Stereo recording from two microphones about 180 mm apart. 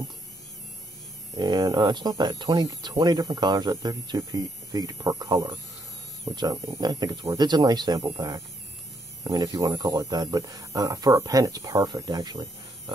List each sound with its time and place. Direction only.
1.3 s speech: 25° right (ahead or behind)